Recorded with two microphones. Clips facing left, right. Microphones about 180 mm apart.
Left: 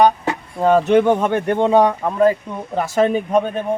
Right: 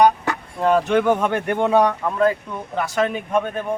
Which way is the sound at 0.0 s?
30° left (ahead or behind).